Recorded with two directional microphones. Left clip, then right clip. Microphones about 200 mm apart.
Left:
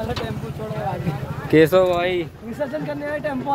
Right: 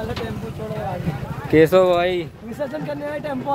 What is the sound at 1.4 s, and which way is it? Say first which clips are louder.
Speech: even; centre (ahead or behind).